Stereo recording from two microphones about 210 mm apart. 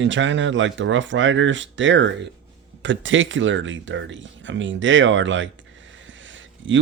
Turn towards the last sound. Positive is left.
turn(degrees=-65)  # may be behind; listen again after turning